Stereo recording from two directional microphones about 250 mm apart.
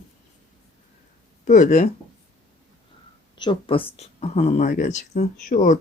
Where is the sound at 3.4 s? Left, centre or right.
Centre.